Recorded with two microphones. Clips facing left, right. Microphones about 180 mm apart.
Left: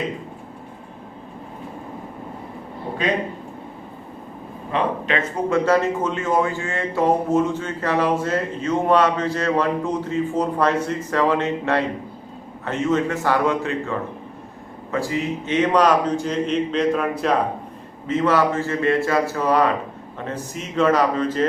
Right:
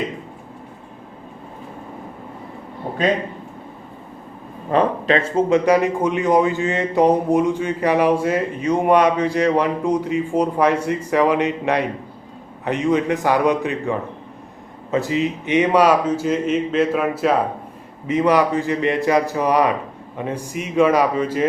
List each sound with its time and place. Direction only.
4.7 s speech: 40° right (ahead or behind)
5.5 s speech: 15° right (ahead or behind)